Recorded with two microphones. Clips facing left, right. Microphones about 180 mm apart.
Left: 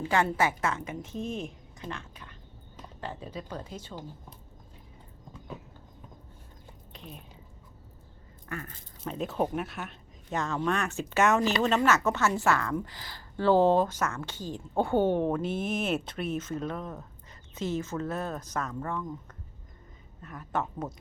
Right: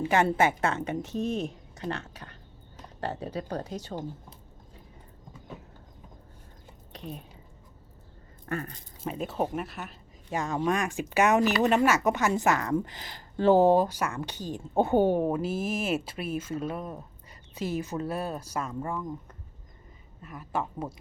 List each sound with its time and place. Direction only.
0.0 s a woman's voice: 20° right (ahead or behind)
0.9 s speech: 75° right (ahead or behind)
1.3 s speech: 40° right (ahead or behind)
1.8 s a woman's voice: 70° right (ahead or behind)
8.4 s speech: 35° right (ahead or behind)
9.0 s a woman's voice: 5° right (ahead or behind)
20.2 s a woman's voice: 5° right (ahead or behind)